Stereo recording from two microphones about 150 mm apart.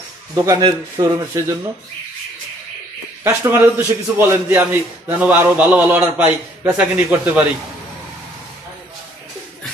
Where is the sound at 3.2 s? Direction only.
20° right (ahead or behind).